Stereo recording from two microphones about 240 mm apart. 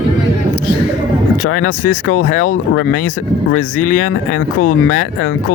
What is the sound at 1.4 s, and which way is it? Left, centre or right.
Speech, left.